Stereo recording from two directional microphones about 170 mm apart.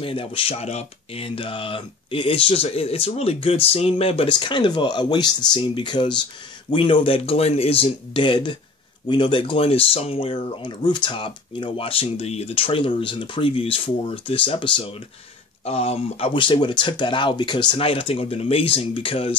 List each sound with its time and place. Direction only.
0.0 s speech: 30° left (ahead or behind)